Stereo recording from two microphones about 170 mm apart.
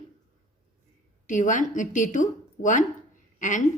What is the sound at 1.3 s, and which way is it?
A woman's voice, 50° left (ahead or behind).